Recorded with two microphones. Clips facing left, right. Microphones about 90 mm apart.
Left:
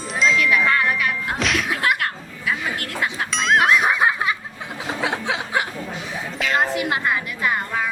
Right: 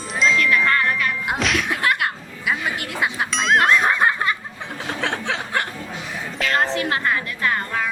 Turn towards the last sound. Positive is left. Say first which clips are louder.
# even
turn(degrees=10)  # may be behind; listen again after turning